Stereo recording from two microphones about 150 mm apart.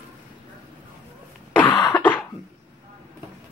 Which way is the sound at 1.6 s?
10° left (ahead or behind).